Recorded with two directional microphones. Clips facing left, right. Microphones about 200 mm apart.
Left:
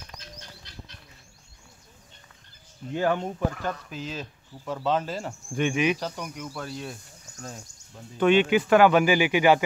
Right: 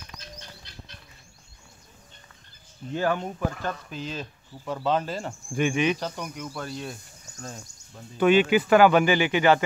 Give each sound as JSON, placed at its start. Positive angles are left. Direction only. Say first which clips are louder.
{"t": 2.9, "sound": "speech", "louder": "left 1 dB", "side_deg": 20}
{"t": 3.6, "sound": "speech", "louder": "even", "side_deg": 5}
{"t": 5.8, "sound": "speech", "louder": "even", "side_deg": 5}
{"t": 8.2, "sound": "speech", "louder": "right 1 dB", "side_deg": -5}